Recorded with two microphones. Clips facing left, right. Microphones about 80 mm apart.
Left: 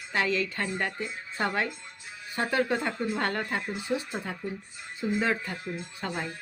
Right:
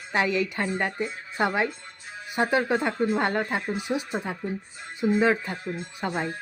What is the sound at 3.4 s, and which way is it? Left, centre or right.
Speech, right.